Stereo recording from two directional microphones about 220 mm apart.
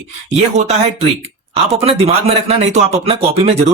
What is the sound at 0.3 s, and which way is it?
Speech, 30° right (ahead or behind).